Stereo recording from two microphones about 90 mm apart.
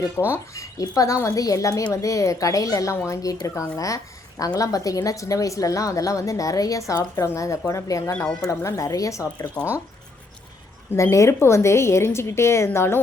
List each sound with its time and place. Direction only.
0.3 s a woman's voice: 35° left (ahead or behind)
10.9 s a woman's voice: 35° left (ahead or behind)